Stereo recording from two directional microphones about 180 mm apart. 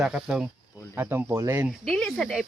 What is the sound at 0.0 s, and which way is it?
Speech, 5° right (ahead or behind).